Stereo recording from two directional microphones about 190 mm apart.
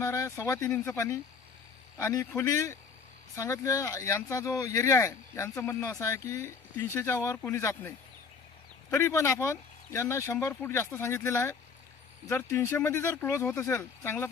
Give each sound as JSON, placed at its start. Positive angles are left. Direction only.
{"t": 0.0, "sound": "speech", "side_deg": 15}